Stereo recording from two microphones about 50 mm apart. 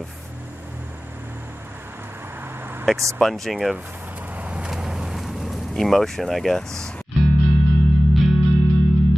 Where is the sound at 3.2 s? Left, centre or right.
Centre.